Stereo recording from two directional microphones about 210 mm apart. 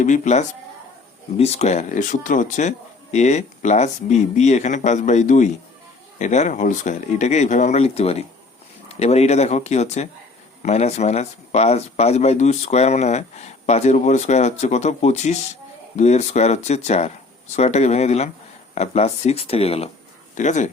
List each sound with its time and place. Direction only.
0.0 s speech: 35° left (ahead or behind)